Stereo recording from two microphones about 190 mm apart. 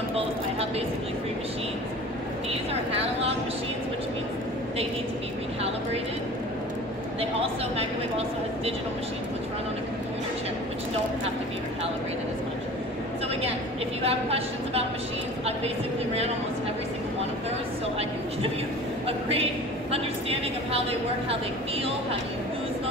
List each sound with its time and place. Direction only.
0.1 s a sound: 30° right (ahead or behind)
2.9 s speech: 30° right (ahead or behind)
7.2 s speech: 30° right (ahead or behind)
14.0 s speech: 30° right (ahead or behind)
19.0 s speech: 30° right (ahead or behind)